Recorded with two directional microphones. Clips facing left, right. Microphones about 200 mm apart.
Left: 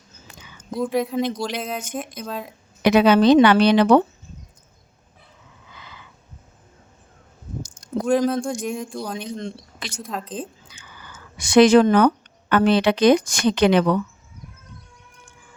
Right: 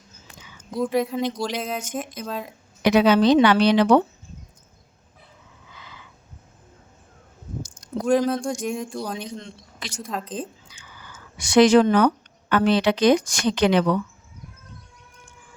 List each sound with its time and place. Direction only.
0.8 s speech: centre (ahead or behind)
2.8 s speech: 55° left (ahead or behind)
8.0 s speech: centre (ahead or behind)
9.4 s speech: 55° left (ahead or behind)
10.0 s speech: centre (ahead or behind)
10.7 s whispering: 55° left (ahead or behind)
11.3 s speech: 55° left (ahead or behind)